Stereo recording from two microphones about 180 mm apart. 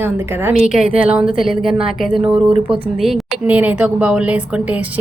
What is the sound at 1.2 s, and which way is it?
Speech, 30° right (ahead or behind).